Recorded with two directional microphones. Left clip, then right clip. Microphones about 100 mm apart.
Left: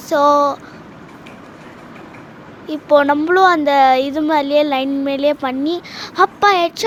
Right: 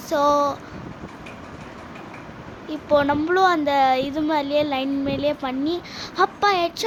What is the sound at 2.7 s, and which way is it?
Speech, 60° left (ahead or behind).